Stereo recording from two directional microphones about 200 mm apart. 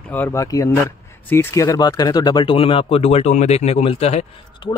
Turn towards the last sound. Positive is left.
turn(degrees=30)  # may be behind; listen again after turning